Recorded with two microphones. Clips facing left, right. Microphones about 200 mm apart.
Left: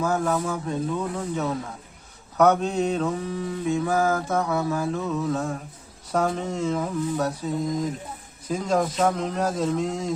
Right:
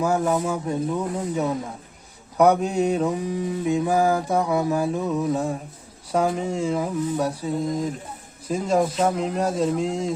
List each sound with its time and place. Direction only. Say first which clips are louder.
0.0 s mantra: right 2 dB; 15° right (ahead or behind)
8.4 s mantra: right 2 dB; 5° right (ahead or behind)